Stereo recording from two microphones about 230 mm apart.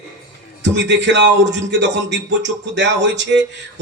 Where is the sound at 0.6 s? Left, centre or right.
Right.